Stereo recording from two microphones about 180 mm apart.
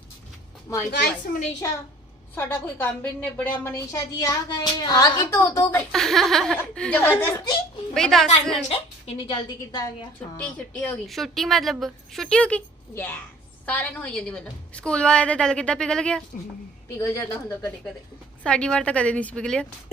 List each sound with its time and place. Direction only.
0.7 s a woman's voice: 15° left (ahead or behind)
5.9 s speech: centre (ahead or behind)
7.9 s speech: centre (ahead or behind)
8.7 s a woman's voice: 30° left (ahead or behind)
10.2 s speech: 10° left (ahead or behind)
17.0 s a woman's voice: 15° left (ahead or behind)
18.4 s speech: 5° left (ahead or behind)